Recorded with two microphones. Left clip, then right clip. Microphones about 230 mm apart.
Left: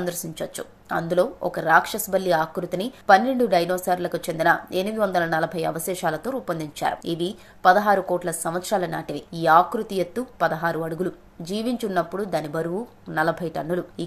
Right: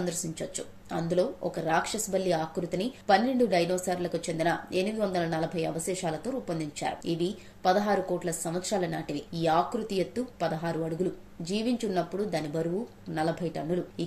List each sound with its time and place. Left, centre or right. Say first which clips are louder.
0.0 s speech: left 5 dB; centre